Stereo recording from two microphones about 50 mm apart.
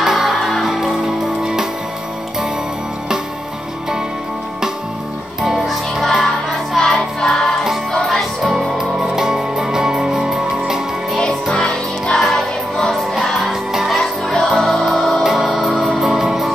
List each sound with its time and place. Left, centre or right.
0.0 s music: centre
5.4 s music: centre
8.7 s music: centre
11.4 s music: centre